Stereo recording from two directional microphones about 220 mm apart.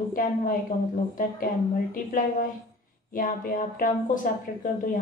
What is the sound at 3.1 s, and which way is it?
A woman's voice, 40° left (ahead or behind).